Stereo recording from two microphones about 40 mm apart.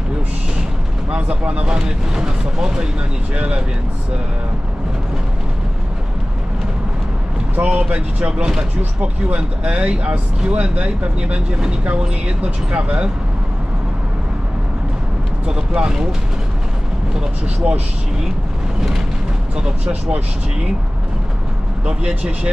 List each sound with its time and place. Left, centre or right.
1.1 s speech: right
7.6 s speech: right
7.9 s speech: right
15.5 s speech: centre
18.8 s vehicle: centre
19.5 s speech: right
21.8 s speech: right